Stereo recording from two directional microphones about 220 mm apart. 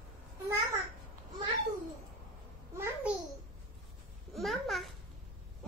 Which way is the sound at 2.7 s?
10° right (ahead or behind).